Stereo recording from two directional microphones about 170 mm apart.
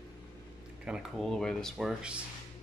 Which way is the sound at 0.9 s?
5° right (ahead or behind).